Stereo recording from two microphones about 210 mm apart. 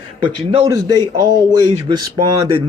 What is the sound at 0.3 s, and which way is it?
Speech, 20° right (ahead or behind).